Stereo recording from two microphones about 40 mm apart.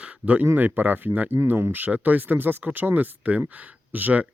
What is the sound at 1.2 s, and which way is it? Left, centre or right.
Speech, right.